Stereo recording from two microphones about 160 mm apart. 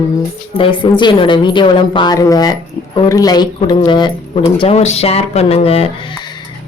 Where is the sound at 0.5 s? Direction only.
30° left (ahead or behind).